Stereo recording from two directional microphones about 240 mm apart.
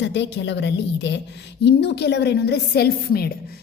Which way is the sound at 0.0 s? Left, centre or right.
Left.